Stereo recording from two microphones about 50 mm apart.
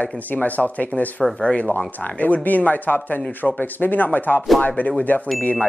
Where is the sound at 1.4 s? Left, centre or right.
Left.